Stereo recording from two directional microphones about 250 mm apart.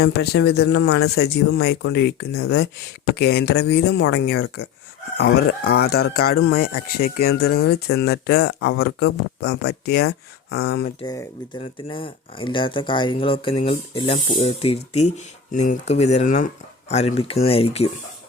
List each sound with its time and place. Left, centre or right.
0.0 s speech: left
2.4 s speech: left
3.2 s speech: left
11.6 s speech: centre